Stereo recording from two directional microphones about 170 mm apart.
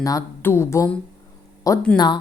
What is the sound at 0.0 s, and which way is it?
Speech, 20° left (ahead or behind).